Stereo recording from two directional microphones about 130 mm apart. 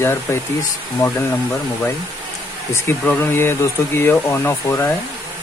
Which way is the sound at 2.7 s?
20° left (ahead or behind).